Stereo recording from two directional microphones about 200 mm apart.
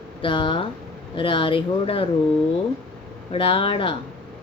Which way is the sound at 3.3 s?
25° left (ahead or behind).